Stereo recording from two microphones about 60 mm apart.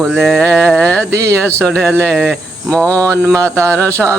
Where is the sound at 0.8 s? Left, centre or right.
Left.